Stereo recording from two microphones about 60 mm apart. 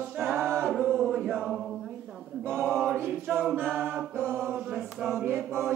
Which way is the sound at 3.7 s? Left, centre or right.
Right.